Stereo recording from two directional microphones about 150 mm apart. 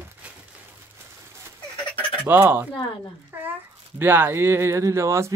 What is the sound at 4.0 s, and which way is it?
Speech, 15° right (ahead or behind).